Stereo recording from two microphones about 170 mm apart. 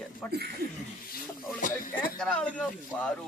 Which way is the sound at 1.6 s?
50° left (ahead or behind).